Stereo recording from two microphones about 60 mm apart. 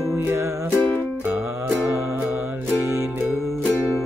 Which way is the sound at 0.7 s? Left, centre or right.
Left.